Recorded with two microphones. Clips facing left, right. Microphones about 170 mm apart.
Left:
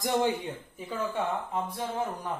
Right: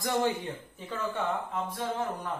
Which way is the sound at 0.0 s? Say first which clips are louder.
Left 1 dB; 15° left (ahead or behind).